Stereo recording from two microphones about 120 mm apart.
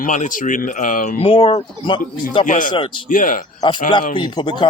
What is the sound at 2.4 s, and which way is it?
Speech, 90° left.